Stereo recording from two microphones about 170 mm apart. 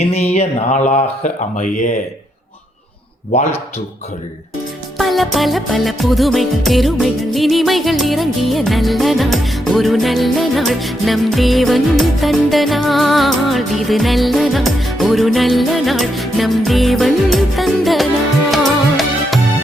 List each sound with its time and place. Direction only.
0.0 s speech: 35° left (ahead or behind)
4.9 s music: centre (ahead or behind)